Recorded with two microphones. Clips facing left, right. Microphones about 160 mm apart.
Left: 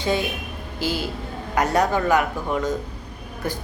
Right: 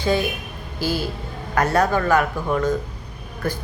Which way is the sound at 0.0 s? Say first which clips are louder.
Right 2 dB; 20° left (ahead or behind).